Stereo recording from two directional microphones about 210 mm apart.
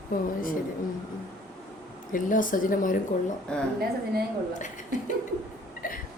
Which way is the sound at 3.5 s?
5° left (ahead or behind).